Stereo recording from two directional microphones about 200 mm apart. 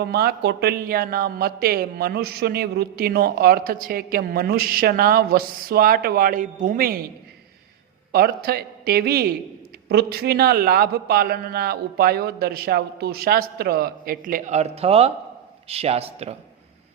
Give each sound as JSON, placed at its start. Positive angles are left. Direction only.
{"t": 0.0, "sound": "a man's voice", "side_deg": -50}
{"t": 8.1, "sound": "a man's voice", "side_deg": -50}